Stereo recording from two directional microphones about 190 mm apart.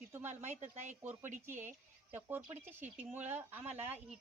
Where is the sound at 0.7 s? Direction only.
40° right (ahead or behind).